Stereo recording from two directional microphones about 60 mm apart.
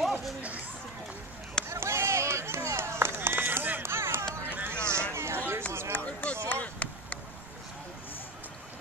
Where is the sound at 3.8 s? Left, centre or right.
Right.